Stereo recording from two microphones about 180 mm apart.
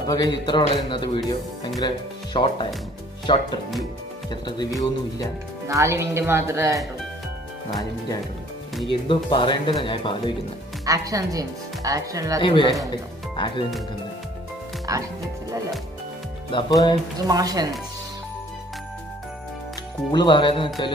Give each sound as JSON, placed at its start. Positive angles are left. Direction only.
{"t": 0.0, "sound": "speech", "side_deg": 20}
{"t": 5.7, "sound": "speech", "side_deg": -15}
{"t": 8.8, "sound": "speech", "side_deg": 30}
{"t": 10.9, "sound": "speech", "side_deg": -20}
{"t": 12.4, "sound": "speech", "side_deg": 25}
{"t": 14.9, "sound": "speech", "side_deg": -20}
{"t": 16.4, "sound": "speech", "side_deg": 25}
{"t": 17.3, "sound": "speech", "side_deg": -20}
{"t": 20.1, "sound": "speech", "side_deg": 25}